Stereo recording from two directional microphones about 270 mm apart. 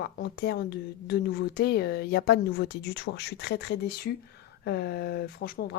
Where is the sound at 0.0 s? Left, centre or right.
Left.